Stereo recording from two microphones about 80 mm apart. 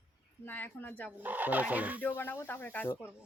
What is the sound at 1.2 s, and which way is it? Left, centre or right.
Speech, right.